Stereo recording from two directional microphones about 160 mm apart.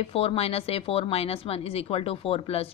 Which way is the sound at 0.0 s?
35° left (ahead or behind).